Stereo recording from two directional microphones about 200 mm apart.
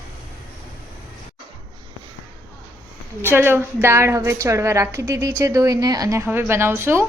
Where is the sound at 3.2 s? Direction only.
10° right (ahead or behind).